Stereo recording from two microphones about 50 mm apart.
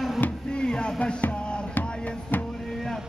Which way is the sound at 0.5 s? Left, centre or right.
Centre.